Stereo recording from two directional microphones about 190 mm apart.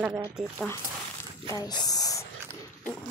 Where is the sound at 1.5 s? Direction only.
20° left (ahead or behind).